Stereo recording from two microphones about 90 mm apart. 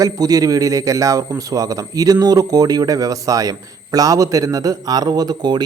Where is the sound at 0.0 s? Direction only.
45° right (ahead or behind).